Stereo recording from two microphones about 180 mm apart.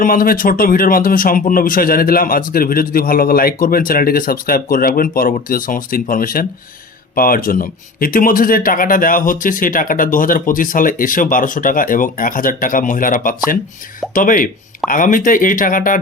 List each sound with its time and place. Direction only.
0.0 s speech: 50° left (ahead or behind)